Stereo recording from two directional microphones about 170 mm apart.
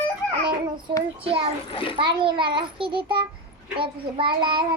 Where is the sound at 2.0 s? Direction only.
30° right (ahead or behind).